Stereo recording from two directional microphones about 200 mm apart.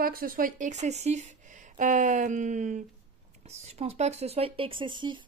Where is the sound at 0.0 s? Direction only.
45° right (ahead or behind).